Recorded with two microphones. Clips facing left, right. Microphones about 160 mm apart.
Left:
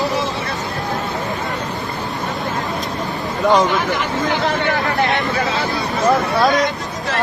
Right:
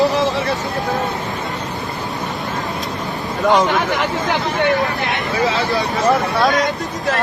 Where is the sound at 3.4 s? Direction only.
Centre (ahead or behind).